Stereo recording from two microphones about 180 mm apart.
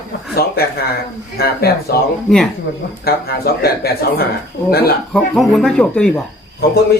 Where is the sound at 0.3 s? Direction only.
60° left (ahead or behind).